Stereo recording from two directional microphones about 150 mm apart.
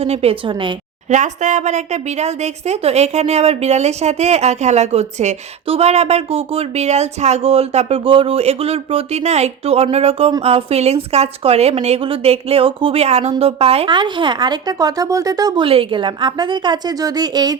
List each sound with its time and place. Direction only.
0.0 s speech: 40° right (ahead or behind)
1.1 s a woman's voice: 55° right (ahead or behind); by 15.6 s 25° right (ahead or behind)
15.6 s a woman's voice: 35° right (ahead or behind)